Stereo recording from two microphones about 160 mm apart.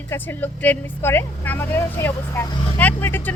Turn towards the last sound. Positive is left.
turn(degrees=15)  # may be behind; listen again after turning